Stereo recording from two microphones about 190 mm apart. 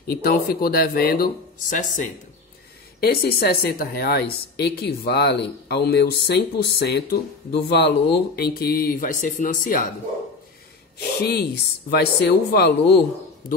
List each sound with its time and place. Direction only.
0.0 s speech: 55° left (ahead or behind)
3.0 s speech: 55° left (ahead or behind)
11.0 s speech: 55° left (ahead or behind)